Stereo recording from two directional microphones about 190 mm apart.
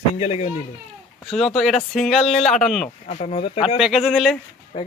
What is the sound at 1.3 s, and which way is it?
Speech, centre (ahead or behind).